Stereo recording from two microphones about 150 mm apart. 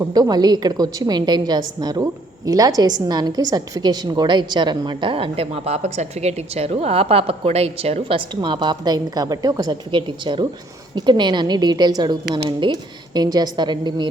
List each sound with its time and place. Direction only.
0.0 s a woman's voice: 25° right (ahead or behind)